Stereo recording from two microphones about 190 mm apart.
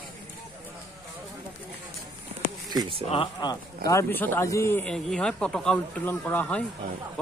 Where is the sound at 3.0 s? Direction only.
25° left (ahead or behind).